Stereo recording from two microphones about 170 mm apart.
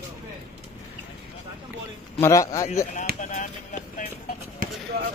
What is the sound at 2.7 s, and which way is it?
Speech, 45° left (ahead or behind).